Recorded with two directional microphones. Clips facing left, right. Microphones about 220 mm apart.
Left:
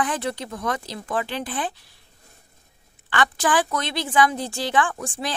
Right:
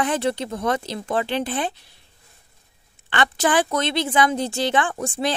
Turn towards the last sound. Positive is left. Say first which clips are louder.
# right 4 dB
turn(degrees=-25)  # may be behind; listen again after turning